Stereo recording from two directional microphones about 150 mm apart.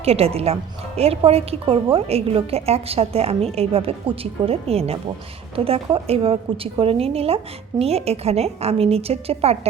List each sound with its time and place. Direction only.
0.0 s a woman's voice: 45° right (ahead or behind)